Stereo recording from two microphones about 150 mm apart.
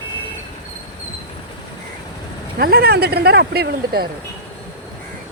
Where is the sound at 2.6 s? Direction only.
85° right.